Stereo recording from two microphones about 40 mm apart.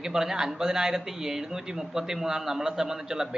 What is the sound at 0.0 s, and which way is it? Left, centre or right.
Speech, centre.